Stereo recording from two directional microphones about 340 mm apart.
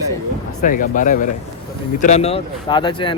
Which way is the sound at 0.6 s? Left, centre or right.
Left.